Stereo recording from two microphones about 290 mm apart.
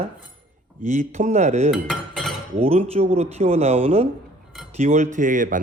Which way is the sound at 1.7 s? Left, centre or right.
Centre.